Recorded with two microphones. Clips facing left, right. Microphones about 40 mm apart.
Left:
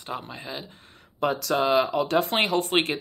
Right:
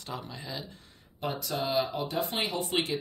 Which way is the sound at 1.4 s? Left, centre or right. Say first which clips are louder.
Left 7 dB; left.